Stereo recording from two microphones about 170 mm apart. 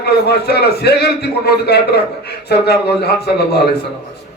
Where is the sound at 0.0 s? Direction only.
75° left (ahead or behind).